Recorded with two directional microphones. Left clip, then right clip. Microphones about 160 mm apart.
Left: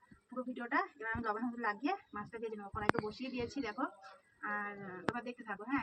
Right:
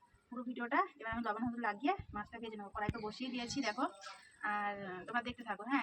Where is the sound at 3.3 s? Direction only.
60° right (ahead or behind).